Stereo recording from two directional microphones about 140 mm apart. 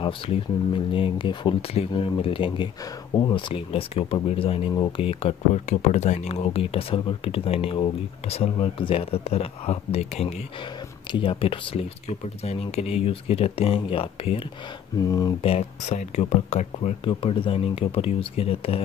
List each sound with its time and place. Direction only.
0.0 s speech: 40° left (ahead or behind)
15.0 s speech: 25° left (ahead or behind)
15.4 s speech: 50° left (ahead or behind)
17.1 s speech: 40° left (ahead or behind)